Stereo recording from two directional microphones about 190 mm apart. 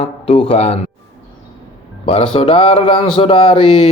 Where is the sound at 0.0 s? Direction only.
30° left (ahead or behind).